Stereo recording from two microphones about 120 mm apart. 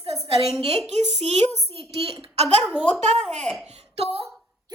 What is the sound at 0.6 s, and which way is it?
Speech, 55° right (ahead or behind).